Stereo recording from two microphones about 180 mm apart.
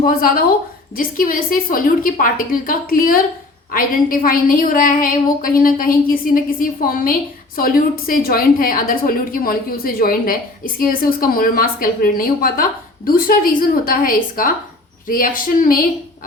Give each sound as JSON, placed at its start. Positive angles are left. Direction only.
{"t": 0.0, "sound": "a woman's voice", "side_deg": 55}